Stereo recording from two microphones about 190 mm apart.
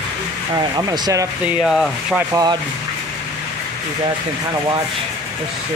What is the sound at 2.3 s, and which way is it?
Speech, 20° right (ahead or behind).